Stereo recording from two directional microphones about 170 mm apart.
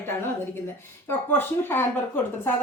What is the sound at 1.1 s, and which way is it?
Speech, 15° left (ahead or behind).